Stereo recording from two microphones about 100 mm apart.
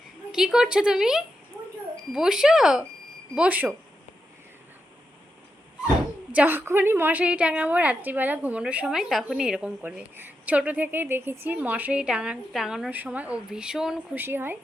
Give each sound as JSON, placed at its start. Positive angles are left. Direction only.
{"t": 0.3, "sound": "a woman's voice", "side_deg": -5}
{"t": 6.3, "sound": "a woman's voice", "side_deg": -20}
{"t": 12.9, "sound": "a woman's voice", "side_deg": -15}
{"t": 14.2, "sound": "a woman's voice", "side_deg": -20}